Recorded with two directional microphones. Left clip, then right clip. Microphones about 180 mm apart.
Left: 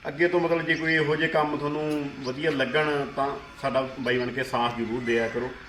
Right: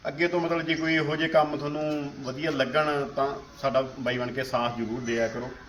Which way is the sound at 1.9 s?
15° right (ahead or behind).